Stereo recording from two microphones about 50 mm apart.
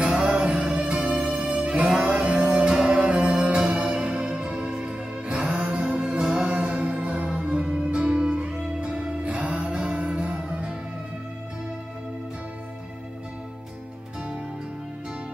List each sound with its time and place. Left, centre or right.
0.0 s music: centre
1.1 s music: centre; by 10.8 s right